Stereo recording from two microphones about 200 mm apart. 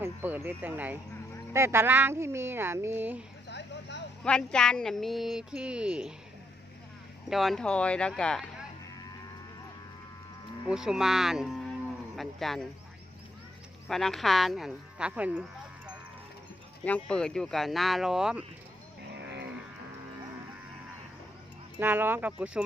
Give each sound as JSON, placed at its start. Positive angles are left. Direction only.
{"t": 0.0, "sound": "speech", "side_deg": -10}
{"t": 3.5, "sound": "vehicle", "side_deg": 60}
{"t": 4.2, "sound": "speech", "side_deg": 5}
{"t": 7.3, "sound": "speech", "side_deg": 0}
{"t": 10.7, "sound": "speech", "side_deg": -5}
{"t": 13.8, "sound": "speech", "side_deg": 0}
{"t": 16.8, "sound": "speech", "side_deg": 5}
{"t": 21.8, "sound": "speech", "side_deg": -10}